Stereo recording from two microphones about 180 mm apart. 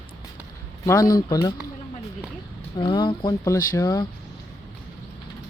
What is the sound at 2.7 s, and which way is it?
Speech, 25° left (ahead or behind).